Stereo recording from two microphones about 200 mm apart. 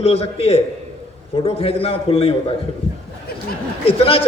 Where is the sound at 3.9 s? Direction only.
30° left (ahead or behind).